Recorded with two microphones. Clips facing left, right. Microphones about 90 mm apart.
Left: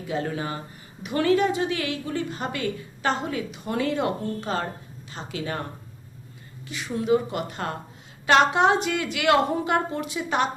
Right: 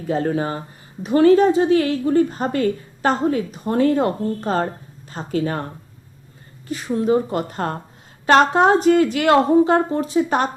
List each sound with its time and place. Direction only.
0.1 s a woman's voice: 40° right (ahead or behind)
6.7 s a woman's voice: 40° right (ahead or behind)